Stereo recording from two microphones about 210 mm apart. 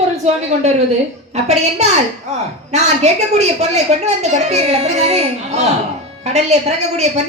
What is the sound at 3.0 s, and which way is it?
Speech, 30° right (ahead or behind).